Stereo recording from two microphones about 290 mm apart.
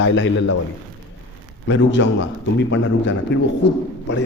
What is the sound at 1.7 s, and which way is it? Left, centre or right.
Speech, left.